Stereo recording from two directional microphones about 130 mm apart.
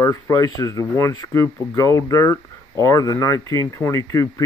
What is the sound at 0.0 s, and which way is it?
Speech, 25° left (ahead or behind).